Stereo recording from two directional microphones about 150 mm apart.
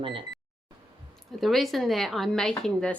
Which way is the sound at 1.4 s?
Centre (ahead or behind).